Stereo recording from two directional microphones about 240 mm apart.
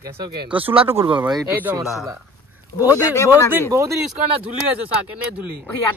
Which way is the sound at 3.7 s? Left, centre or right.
Centre.